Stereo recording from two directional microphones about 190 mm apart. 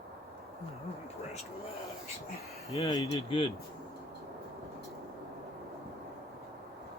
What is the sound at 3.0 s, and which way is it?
Speech, 30° left (ahead or behind).